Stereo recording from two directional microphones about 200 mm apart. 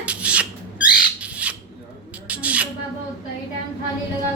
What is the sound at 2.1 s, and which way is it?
Mouse, 5° right (ahead or behind).